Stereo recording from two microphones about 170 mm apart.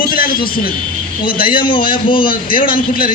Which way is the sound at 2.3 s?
55° left (ahead or behind).